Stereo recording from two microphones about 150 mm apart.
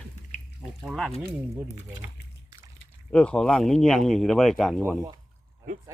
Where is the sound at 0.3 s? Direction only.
50° left (ahead or behind).